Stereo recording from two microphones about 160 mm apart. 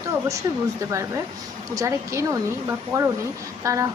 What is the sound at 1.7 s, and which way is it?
A woman's voice, 20° right (ahead or behind).